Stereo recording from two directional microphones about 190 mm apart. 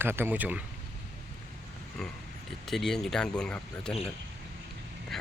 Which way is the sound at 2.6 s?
Centre (ahead or behind).